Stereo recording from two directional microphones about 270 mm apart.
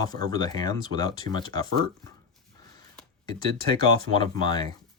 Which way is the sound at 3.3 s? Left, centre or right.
Centre.